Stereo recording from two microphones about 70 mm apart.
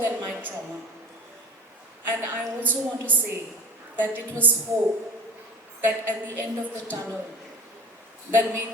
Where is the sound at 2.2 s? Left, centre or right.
Right.